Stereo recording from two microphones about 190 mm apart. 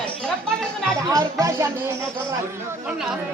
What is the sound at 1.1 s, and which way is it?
Music, 15° right (ahead or behind).